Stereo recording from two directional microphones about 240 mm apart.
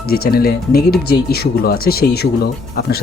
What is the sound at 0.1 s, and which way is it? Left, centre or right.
Speech, left.